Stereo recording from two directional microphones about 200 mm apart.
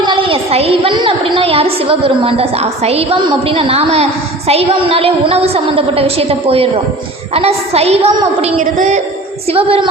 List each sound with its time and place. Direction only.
0.0 s a woman's voice: 25° right (ahead or behind)